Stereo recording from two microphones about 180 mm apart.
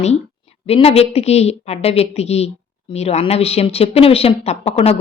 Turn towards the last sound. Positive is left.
turn(degrees=35)  # may be behind; listen again after turning